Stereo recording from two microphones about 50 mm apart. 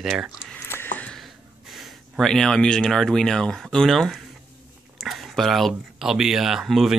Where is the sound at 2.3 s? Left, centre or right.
Centre.